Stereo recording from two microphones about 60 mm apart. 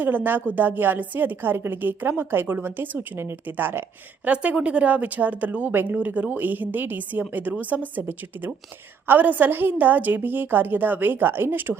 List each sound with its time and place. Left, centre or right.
0.0 s a woman's voice: right
4.3 s a woman's voice: right